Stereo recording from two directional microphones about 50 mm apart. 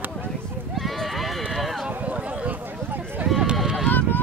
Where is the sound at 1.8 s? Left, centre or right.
Right.